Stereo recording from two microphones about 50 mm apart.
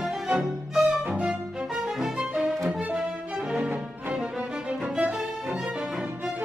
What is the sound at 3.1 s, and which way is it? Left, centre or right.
Music, centre.